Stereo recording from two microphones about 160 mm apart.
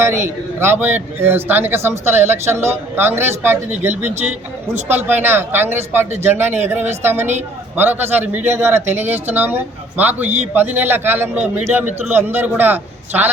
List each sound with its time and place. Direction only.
0.0 s a man's voice: 15° right (ahead or behind)